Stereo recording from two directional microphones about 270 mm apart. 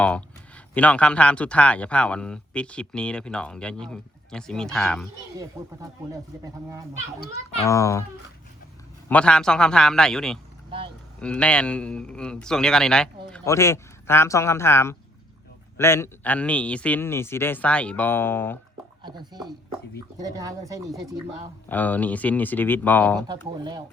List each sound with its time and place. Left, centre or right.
0.0 s speech: centre
5.4 s speech: centre
7.7 s a man's voice: centre
9.0 s speech: centre
10.7 s speech: centre
11.2 s a man's voice: centre
19.0 s speech: centre
21.7 s a man's voice: centre
23.2 s speech: centre